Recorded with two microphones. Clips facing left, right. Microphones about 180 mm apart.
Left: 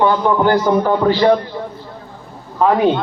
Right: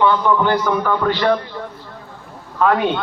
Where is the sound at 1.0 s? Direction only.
25° left (ahead or behind).